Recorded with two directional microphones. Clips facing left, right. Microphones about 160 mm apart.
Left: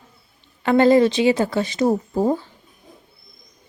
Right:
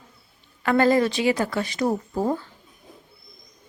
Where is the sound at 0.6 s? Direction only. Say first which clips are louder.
Left 5 dB; 25° left (ahead or behind).